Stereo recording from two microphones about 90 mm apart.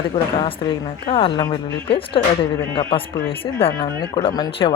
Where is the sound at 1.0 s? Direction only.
80° left.